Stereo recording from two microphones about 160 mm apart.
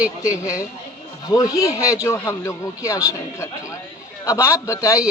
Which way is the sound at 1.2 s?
20° left (ahead or behind).